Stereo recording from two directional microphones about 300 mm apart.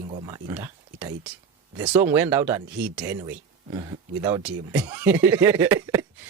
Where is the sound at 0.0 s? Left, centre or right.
Centre.